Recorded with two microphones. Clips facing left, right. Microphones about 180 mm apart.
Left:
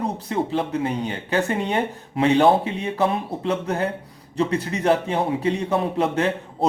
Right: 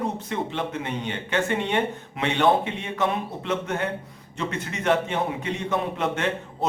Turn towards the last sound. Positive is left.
turn(degrees=35)  # may be behind; listen again after turning